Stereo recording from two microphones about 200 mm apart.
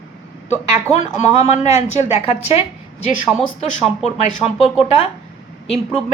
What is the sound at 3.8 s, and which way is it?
Speech, 35° left (ahead or behind).